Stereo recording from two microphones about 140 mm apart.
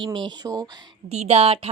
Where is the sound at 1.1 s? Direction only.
50° right (ahead or behind).